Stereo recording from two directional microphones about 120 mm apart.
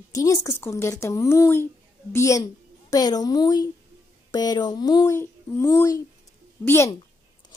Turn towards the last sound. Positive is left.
turn(degrees=20)  # may be behind; listen again after turning